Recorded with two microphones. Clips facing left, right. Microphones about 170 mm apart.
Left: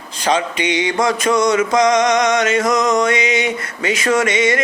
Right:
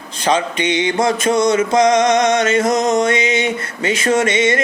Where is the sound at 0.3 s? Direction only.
25° right (ahead or behind).